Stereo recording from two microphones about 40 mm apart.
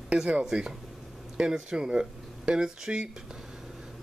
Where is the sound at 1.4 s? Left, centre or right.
Centre.